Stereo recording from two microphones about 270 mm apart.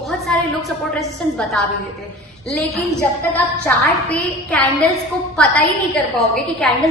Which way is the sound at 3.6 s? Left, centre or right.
Centre.